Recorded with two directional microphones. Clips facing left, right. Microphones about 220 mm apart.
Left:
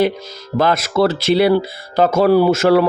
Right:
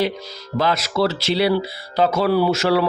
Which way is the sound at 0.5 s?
50° left (ahead or behind).